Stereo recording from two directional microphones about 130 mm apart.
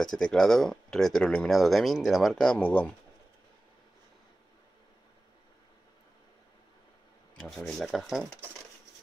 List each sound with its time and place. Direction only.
0.0 s speech: 5° left (ahead or behind)
7.3 s speech: 5° left (ahead or behind)